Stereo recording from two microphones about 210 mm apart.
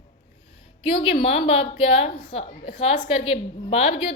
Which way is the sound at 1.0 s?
25° left (ahead or behind).